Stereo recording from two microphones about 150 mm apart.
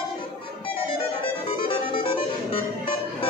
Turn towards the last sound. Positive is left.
turn(degrees=35)  # may be behind; listen again after turning